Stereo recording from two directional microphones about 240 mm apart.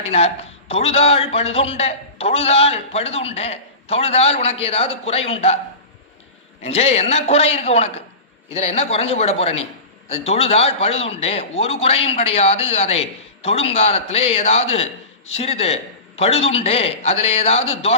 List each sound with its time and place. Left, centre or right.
0.0 s a man's voice: left
6.6 s a man's voice: left